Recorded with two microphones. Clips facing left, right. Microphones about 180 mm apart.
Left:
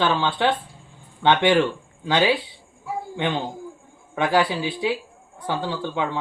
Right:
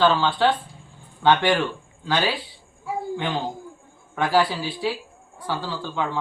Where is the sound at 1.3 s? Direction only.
20° left (ahead or behind).